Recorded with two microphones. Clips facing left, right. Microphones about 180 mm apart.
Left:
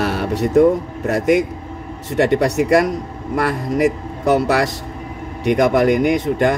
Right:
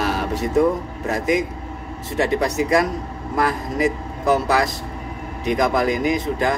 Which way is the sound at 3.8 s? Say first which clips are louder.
Left 4 dB; 75° left (ahead or behind).